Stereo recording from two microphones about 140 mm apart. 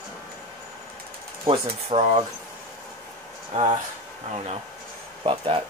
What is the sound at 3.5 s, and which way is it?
Speech, 50° right (ahead or behind).